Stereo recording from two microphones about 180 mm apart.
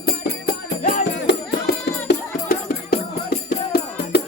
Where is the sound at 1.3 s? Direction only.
80° left.